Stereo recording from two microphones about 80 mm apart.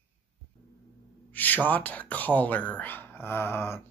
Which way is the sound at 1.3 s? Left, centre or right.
Left.